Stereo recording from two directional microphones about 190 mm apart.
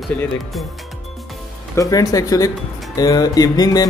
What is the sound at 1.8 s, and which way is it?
A man's voice, 20° left (ahead or behind).